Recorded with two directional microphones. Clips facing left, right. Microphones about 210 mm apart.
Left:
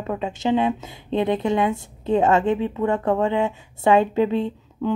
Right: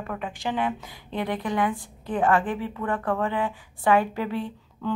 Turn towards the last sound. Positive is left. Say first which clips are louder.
# left 5 dB
turn(degrees=20)  # may be behind; listen again after turning